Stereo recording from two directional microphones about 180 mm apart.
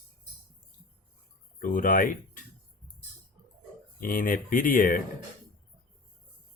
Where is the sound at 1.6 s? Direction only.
50° left (ahead or behind).